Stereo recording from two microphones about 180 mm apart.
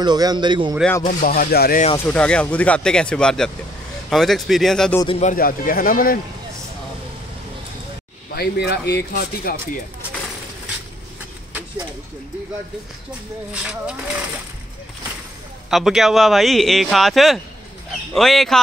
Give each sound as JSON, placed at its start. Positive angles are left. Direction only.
{"t": 0.0, "sound": "speech", "side_deg": -20}
{"t": 1.0, "sound": "speech", "side_deg": 50}
{"t": 2.0, "sound": "speech", "side_deg": 5}
{"t": 5.0, "sound": "speech", "side_deg": 30}
{"t": 5.3, "sound": "speech", "side_deg": 50}
{"t": 8.4, "sound": "speech", "side_deg": 65}
{"t": 13.5, "sound": "speech", "side_deg": -5}
{"t": 15.7, "sound": "speech", "side_deg": 0}